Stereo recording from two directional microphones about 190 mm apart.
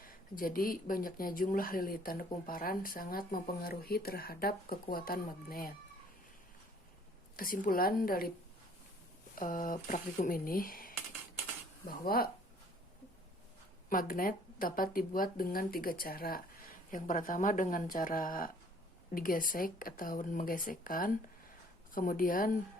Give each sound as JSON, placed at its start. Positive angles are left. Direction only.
{"t": 0.0, "sound": "speech", "side_deg": 50}
{"t": 7.3, "sound": "speech", "side_deg": 50}
{"t": 9.3, "sound": "speech", "side_deg": 45}
{"t": 13.9, "sound": "speech", "side_deg": 45}